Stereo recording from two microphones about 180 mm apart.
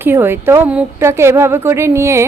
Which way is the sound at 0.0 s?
10° right (ahead or behind).